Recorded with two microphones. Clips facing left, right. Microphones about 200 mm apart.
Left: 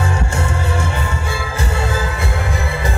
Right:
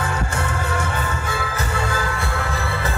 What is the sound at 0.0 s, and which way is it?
Music, 25° left (ahead or behind).